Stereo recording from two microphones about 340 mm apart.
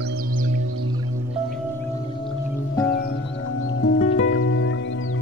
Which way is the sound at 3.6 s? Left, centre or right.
Left.